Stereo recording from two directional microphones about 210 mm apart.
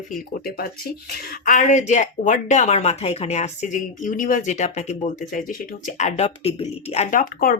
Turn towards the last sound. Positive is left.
turn(degrees=40)  # may be behind; listen again after turning